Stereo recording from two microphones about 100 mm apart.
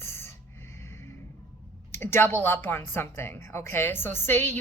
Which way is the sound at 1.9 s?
25° left (ahead or behind).